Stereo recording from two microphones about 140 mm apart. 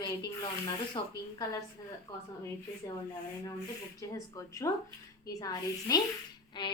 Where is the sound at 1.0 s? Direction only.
30° left (ahead or behind).